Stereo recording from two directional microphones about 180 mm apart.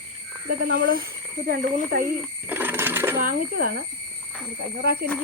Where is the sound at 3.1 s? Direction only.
50° right (ahead or behind).